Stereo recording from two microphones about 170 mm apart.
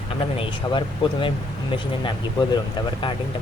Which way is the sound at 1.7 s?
30° left (ahead or behind).